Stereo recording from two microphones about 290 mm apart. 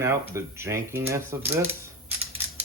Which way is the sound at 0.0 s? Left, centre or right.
Centre.